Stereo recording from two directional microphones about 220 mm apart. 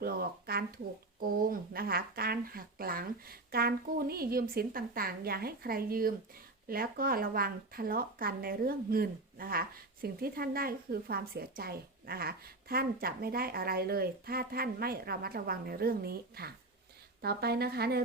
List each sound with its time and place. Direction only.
0.0 s speech: 45° right (ahead or behind)